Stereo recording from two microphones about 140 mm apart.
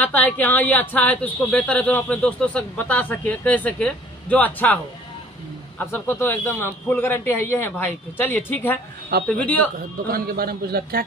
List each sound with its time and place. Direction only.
0.0 s speech: 10° left (ahead or behind)
5.9 s speech: 15° left (ahead or behind)
10.1 s a man's voice: 90° right